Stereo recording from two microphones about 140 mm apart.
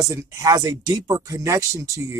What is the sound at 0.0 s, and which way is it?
A woman's voice, 20° right (ahead or behind).